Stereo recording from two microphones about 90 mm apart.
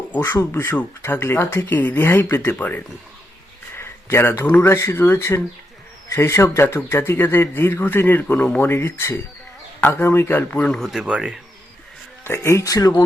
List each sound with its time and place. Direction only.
0.1 s a man's voice: 25° left (ahead or behind)
10.5 s speech: 10° left (ahead or behind)
10.9 s speech: 10° right (ahead or behind)
12.2 s speech: 25° left (ahead or behind)